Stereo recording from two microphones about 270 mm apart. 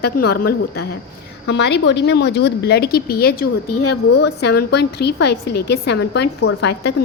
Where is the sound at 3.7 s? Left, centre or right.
Left.